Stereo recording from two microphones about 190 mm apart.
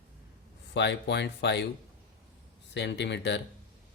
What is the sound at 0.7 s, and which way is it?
Speech, 65° left (ahead or behind).